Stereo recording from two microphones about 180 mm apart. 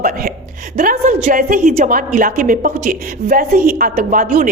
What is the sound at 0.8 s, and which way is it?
A woman's voice, 45° right (ahead or behind).